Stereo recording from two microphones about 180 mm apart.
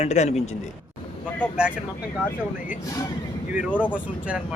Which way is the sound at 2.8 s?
20° left (ahead or behind).